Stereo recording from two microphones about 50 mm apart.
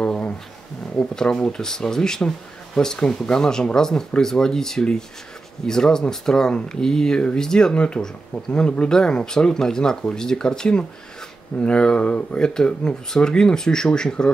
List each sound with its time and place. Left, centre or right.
0.0 s speech: centre